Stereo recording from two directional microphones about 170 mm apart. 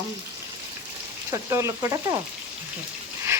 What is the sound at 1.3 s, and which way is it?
Speech, 20° right (ahead or behind).